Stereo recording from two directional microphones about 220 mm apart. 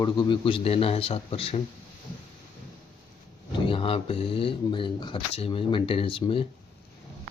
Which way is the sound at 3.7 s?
25° left (ahead or behind).